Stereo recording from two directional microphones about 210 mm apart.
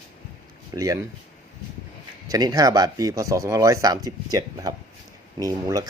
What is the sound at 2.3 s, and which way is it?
Speech, 15° right (ahead or behind).